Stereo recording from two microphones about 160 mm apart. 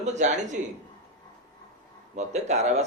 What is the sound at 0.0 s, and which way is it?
Speech, 45° right (ahead or behind).